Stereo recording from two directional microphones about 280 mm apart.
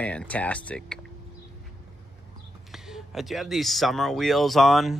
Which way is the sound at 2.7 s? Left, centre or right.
Centre.